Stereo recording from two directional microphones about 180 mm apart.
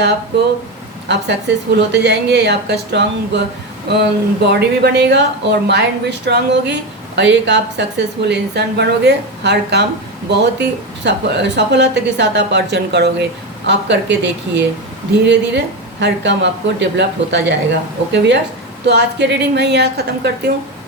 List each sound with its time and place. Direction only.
1.0 s a woman's voice: 75° right (ahead or behind)
4.6 s a woman's voice: 70° right (ahead or behind)